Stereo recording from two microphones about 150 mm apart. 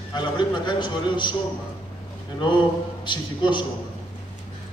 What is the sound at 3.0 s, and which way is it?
Speech, 30° left (ahead or behind).